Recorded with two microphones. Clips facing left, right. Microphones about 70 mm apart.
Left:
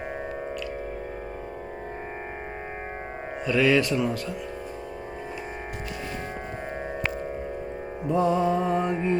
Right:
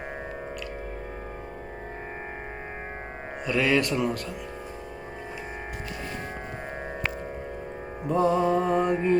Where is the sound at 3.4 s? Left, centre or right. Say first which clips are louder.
Left 3 dB; right.